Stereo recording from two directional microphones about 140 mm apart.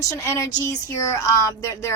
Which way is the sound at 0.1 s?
20° left (ahead or behind).